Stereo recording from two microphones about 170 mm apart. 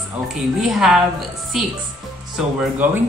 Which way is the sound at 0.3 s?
Centre (ahead or behind).